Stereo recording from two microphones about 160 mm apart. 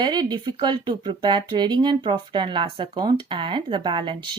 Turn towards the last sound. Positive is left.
turn(degrees=-30)  # may be behind; listen again after turning